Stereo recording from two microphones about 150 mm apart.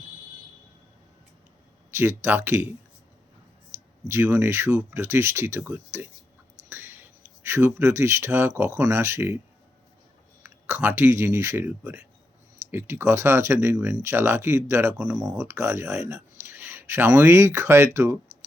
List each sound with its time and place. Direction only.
2.0 s speech: 15° right (ahead or behind)
4.1 s speech: 15° right (ahead or behind)
10.4 s speech: 15° right (ahead or behind)